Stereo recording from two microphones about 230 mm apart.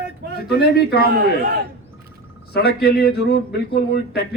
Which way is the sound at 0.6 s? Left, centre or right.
Left.